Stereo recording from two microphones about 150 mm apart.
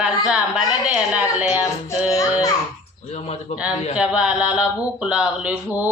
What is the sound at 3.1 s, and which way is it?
Speech, 45° left (ahead or behind).